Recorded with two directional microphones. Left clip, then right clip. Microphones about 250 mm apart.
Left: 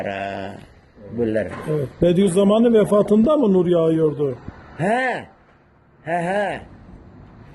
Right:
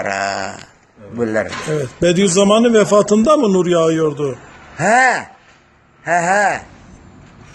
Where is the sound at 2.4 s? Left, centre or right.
Right.